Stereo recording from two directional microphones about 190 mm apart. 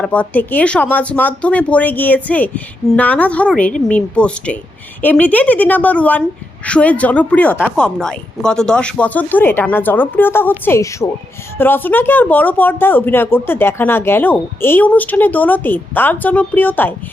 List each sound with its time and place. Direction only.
0.0 s speech: 10° left (ahead or behind)